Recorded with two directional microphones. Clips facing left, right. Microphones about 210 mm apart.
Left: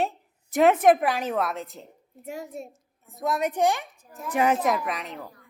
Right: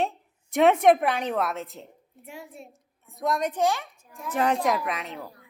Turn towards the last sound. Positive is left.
turn(degrees=0)  # may be behind; listen again after turning